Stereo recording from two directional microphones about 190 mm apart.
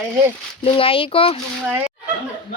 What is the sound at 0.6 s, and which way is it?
Speech, 30° left (ahead or behind).